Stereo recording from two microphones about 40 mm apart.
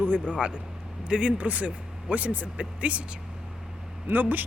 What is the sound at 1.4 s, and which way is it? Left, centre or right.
Speech, right.